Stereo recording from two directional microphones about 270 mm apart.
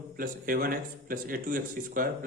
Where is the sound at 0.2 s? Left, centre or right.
Right.